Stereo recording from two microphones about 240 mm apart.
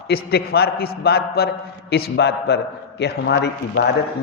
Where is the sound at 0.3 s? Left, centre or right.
Left.